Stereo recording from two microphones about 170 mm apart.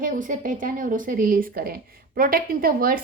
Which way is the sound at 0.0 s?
50° right (ahead or behind).